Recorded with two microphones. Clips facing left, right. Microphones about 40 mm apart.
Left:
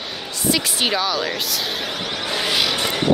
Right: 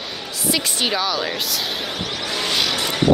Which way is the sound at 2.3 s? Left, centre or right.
Centre.